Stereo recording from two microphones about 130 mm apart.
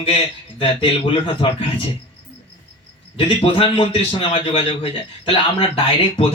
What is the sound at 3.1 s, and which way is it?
Speech, 45° left (ahead or behind).